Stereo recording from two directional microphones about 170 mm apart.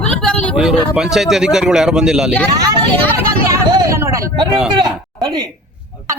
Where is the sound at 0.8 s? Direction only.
Centre (ahead or behind).